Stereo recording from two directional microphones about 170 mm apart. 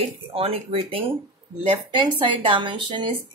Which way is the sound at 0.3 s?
35° right (ahead or behind).